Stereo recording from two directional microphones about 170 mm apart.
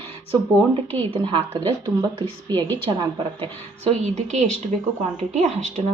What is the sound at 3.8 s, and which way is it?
Speech, 40° right (ahead or behind).